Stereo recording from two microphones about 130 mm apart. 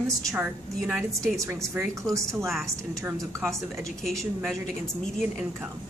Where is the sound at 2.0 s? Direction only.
25° right (ahead or behind).